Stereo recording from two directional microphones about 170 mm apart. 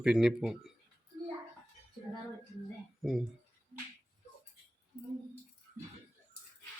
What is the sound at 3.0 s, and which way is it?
Speech, centre (ahead or behind).